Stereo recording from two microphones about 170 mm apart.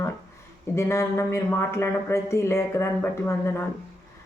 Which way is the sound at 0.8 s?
15° left (ahead or behind).